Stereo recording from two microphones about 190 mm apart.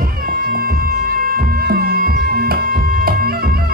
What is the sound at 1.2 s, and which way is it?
Music, 50° right (ahead or behind).